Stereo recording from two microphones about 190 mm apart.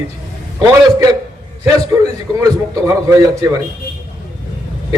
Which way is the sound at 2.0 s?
20° right (ahead or behind).